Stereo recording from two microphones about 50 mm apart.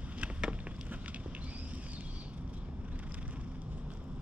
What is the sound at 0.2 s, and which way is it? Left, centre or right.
Vehicle, right.